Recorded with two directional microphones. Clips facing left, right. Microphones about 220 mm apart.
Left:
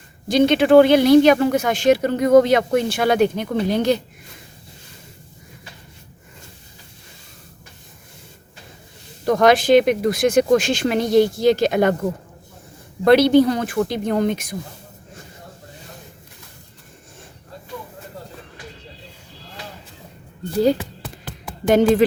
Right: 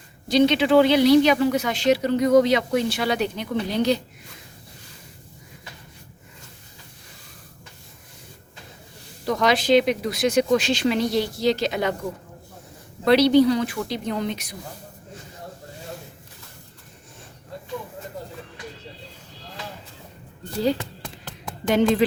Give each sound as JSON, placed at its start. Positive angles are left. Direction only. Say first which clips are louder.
{"t": 0.3, "sound": "speech", "louder": "left 3 dB", "side_deg": 50}
{"t": 9.2, "sound": "speech", "louder": "left 6 dB", "side_deg": 50}
{"t": 13.1, "sound": "speech", "louder": "left 3 dB", "side_deg": 50}
{"t": 21.7, "sound": "speech", "louder": "left 5 dB", "side_deg": 45}